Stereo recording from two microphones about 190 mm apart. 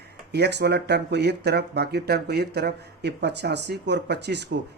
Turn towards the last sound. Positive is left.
turn(degrees=-60)  # may be behind; listen again after turning